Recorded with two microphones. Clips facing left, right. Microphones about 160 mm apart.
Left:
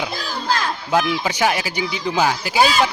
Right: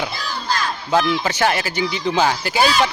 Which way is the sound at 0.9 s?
10° left (ahead or behind).